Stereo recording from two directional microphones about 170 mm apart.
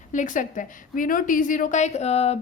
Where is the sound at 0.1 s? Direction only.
50° left (ahead or behind).